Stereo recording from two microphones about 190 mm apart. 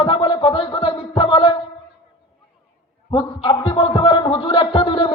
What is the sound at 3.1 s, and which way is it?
A man's voice, 25° left (ahead or behind).